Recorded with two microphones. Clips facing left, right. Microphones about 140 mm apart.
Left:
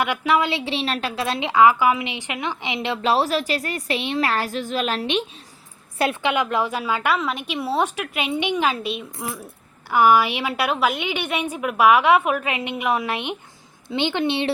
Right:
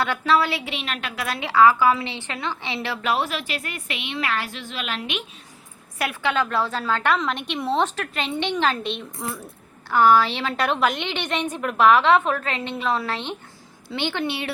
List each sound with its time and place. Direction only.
0.0 s a woman's voice: 15° left (ahead or behind)
6.3 s a woman's voice: 15° left (ahead or behind)